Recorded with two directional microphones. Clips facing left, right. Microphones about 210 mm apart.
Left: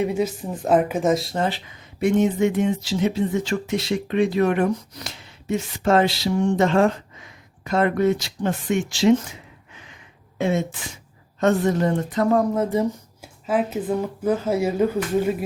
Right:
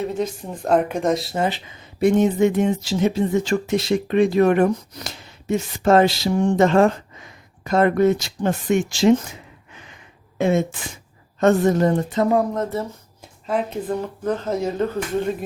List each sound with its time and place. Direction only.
0.0 s speech: 10° left (ahead or behind)
2.0 s speech: 35° right (ahead or behind)
10.3 s speech: 50° right (ahead or behind)
12.0 s speech: 25° right (ahead or behind)
12.5 s speech: 15° left (ahead or behind)
13.5 s speech: 5° left (ahead or behind)